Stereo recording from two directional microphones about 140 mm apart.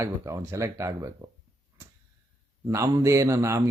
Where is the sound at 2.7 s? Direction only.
20° right (ahead or behind).